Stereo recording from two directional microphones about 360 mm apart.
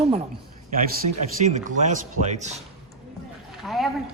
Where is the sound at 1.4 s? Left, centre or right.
Centre.